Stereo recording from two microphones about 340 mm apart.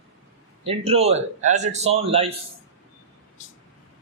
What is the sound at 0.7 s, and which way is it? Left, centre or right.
A man's voice, centre.